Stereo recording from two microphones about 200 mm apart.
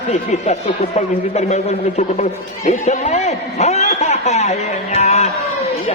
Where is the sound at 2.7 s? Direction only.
35° left (ahead or behind).